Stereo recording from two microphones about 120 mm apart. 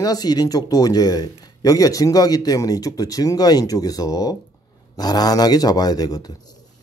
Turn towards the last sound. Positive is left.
turn(degrees=30)  # may be behind; listen again after turning